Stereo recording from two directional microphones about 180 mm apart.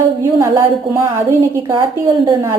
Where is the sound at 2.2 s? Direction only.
15° right (ahead or behind).